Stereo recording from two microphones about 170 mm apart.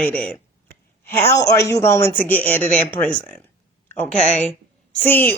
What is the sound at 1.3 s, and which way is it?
Speech, 20° left (ahead or behind).